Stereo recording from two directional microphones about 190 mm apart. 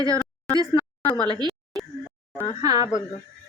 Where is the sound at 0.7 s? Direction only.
20° left (ahead or behind).